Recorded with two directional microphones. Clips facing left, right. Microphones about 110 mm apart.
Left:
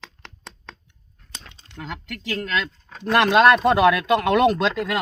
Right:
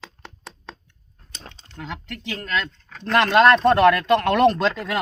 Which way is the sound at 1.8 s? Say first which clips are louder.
Even; centre (ahead or behind).